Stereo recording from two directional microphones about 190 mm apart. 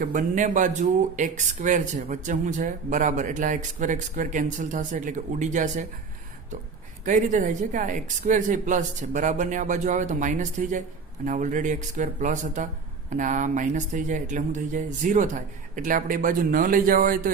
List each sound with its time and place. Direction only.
0.0 s speech: 45° right (ahead or behind)
7.0 s speech: 40° right (ahead or behind)